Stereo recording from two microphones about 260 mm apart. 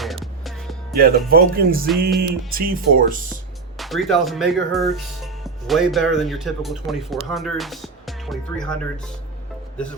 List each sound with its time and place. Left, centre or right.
0.4 s music: centre
0.9 s music: right
3.8 s speech: centre